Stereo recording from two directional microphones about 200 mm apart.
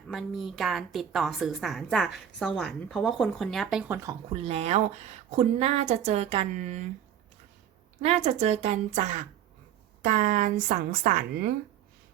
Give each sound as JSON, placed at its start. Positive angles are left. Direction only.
{"t": 0.1, "sound": "a woman's voice", "side_deg": 0}
{"t": 4.3, "sound": "a woman's voice", "side_deg": -30}
{"t": 8.0, "sound": "a woman's voice", "side_deg": -30}